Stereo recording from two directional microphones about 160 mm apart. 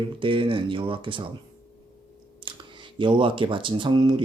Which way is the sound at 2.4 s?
30° right (ahead or behind).